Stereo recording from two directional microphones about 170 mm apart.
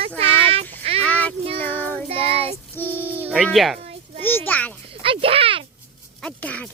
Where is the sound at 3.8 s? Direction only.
40° right (ahead or behind).